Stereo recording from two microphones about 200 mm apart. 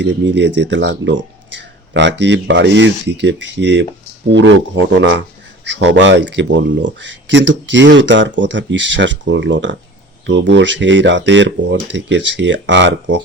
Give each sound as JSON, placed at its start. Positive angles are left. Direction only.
{"t": 0.0, "sound": "speech", "side_deg": -60}